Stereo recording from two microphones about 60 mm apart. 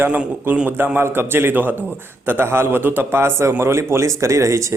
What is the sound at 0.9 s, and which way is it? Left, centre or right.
A man's voice, right.